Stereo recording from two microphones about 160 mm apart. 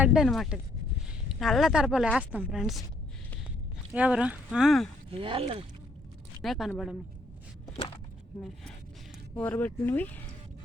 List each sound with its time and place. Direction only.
0.0 s speech: 5° right (ahead or behind)
3.9 s speech: 10° right (ahead or behind)
5.1 s speech: 35° right (ahead or behind)
6.4 s speech: centre (ahead or behind)
8.4 s speech: 5° left (ahead or behind)